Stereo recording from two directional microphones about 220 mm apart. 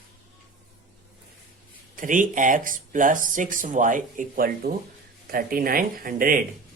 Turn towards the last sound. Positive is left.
turn(degrees=-40)  # may be behind; listen again after turning